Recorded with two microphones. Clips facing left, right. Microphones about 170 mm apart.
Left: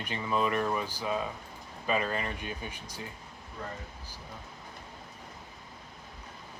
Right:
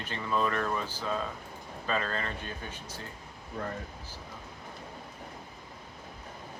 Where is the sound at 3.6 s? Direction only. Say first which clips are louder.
Right 4 dB; 50° right (ahead or behind).